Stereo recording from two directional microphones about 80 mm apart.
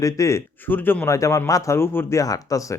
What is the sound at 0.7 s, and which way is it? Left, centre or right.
Speech, left.